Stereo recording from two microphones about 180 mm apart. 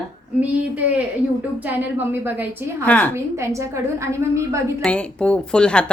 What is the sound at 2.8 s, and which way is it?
Speech, 10° left (ahead or behind).